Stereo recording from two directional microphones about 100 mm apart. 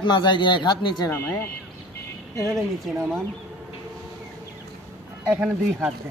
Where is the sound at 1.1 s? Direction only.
25° left (ahead or behind).